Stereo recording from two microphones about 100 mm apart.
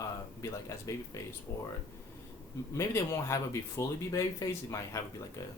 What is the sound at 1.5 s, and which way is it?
Speech, 25° left (ahead or behind).